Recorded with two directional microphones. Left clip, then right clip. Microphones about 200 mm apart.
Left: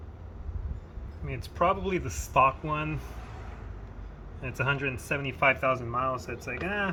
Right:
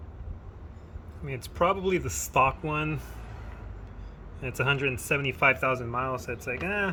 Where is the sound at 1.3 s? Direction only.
50° right (ahead or behind).